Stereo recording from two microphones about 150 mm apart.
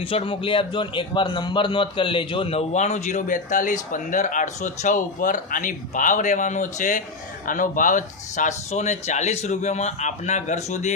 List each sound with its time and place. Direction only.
0.0 s a man's voice: 35° left (ahead or behind)